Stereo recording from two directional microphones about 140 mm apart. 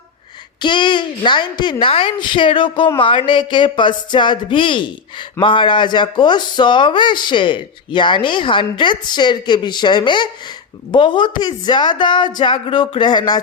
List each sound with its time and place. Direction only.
0.6 s speech: 35° left (ahead or behind)